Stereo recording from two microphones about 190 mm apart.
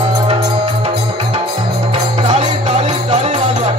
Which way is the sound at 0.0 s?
30° right (ahead or behind).